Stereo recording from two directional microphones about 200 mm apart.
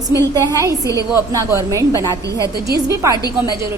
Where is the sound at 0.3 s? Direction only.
15° right (ahead or behind).